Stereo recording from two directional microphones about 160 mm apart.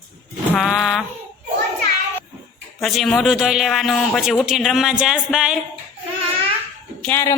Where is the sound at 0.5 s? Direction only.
Centre (ahead or behind).